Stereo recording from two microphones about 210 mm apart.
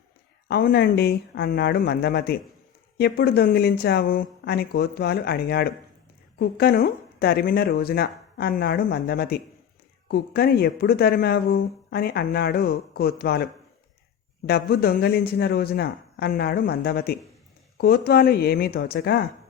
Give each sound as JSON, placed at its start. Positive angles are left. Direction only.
{"t": 0.4, "sound": "a woman's voice", "side_deg": 50}